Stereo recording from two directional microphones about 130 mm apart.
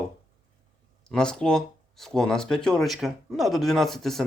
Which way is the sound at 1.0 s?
5° left (ahead or behind).